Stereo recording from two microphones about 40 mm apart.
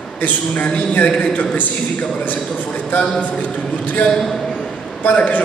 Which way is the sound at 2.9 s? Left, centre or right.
Left.